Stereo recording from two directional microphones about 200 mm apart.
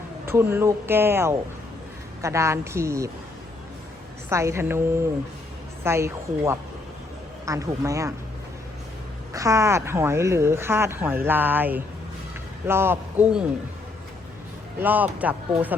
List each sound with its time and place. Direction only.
0.3 s speech: 10° right (ahead or behind)
4.3 s speech: 15° right (ahead or behind)
9.3 s speech: 15° right (ahead or behind)
14.8 s speech: 10° right (ahead or behind)